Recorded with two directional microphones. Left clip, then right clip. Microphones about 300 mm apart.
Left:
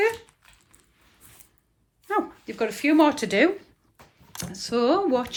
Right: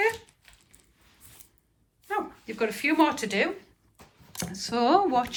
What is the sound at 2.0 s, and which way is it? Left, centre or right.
Speech, centre.